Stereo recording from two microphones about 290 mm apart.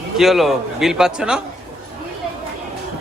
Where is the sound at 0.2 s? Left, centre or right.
Centre.